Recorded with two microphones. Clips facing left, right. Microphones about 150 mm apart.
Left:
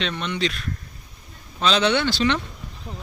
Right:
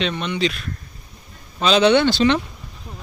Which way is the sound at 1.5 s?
10° right (ahead or behind).